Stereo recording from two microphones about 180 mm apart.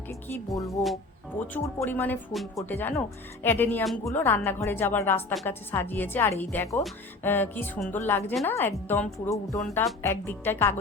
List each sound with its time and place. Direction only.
0.1 s a woman's voice: 15° left (ahead or behind)
9.6 s a woman's voice: 5° left (ahead or behind)